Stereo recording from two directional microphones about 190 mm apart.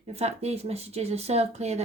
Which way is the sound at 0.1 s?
35° right (ahead or behind).